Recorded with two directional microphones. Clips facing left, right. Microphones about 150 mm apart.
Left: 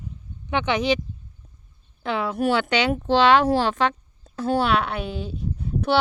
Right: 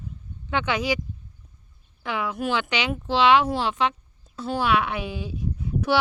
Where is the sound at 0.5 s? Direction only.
20° left (ahead or behind).